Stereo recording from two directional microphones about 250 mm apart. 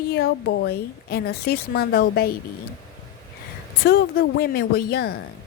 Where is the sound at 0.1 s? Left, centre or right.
Left.